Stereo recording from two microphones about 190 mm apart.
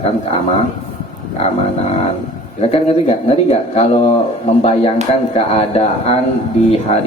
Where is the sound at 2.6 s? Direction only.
35° left (ahead or behind).